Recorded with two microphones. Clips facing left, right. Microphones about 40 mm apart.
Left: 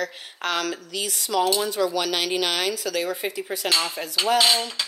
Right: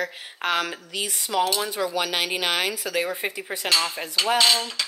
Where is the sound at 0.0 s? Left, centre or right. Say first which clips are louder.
Right 1 dB; centre.